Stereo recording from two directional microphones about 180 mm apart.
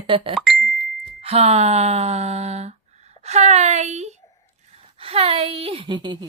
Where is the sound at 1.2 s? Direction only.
35° right (ahead or behind).